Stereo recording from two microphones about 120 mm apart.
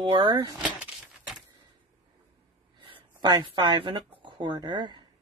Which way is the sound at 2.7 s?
45° right (ahead or behind).